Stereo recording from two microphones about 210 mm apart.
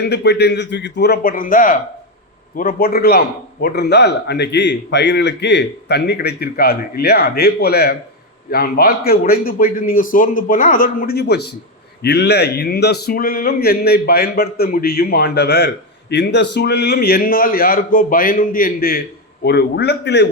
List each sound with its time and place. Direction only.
0.0 s a man's voice: 55° left (ahead or behind)